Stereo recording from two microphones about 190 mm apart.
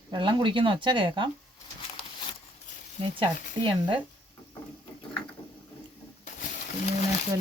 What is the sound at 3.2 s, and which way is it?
Speech, 25° right (ahead or behind).